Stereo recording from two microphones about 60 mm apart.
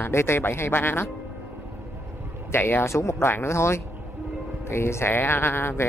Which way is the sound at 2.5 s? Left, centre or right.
Left.